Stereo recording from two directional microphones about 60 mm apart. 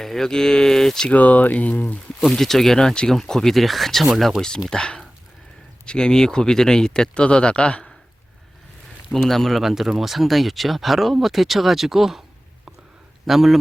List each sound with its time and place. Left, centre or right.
0.0 s speech: centre
1.1 s speech: left
2.3 s speech: centre
4.4 s speech: centre
9.1 s speech: centre
13.2 s speech: centre